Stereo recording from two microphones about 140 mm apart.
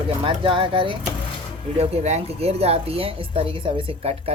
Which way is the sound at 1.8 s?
50° right (ahead or behind).